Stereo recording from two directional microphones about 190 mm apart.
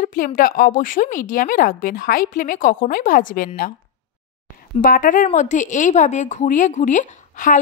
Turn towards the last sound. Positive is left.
turn(degrees=45)  # may be behind; listen again after turning